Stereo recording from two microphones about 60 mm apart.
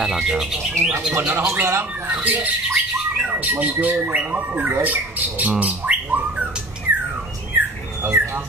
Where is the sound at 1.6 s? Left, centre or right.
Right.